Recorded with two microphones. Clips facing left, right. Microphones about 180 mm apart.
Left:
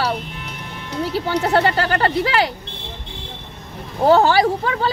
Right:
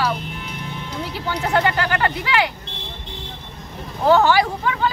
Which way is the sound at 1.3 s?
35° left (ahead or behind).